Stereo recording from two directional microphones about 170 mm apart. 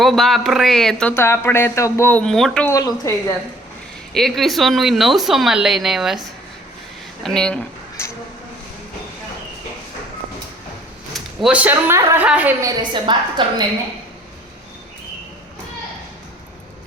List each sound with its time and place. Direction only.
0.0 s speech: centre (ahead or behind)
2.6 s speech: 20° left (ahead or behind)
4.1 s speech: centre (ahead or behind)
8.0 s a sound: 15° left (ahead or behind)
11.1 s speech: centre (ahead or behind)
12.6 s a woman's voice: 25° right (ahead or behind)